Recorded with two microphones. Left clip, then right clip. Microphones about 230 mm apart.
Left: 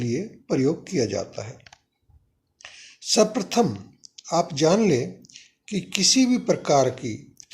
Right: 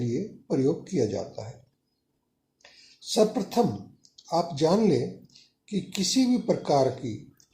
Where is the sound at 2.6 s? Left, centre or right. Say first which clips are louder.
Left 8 dB; left.